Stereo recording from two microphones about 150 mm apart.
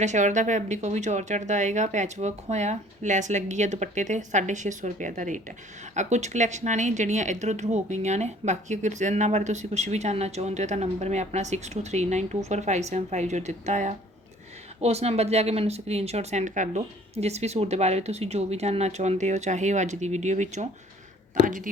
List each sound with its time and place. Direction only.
0.0 s a woman's voice: 55° right (ahead or behind)
21.4 s speech: 65° right (ahead or behind)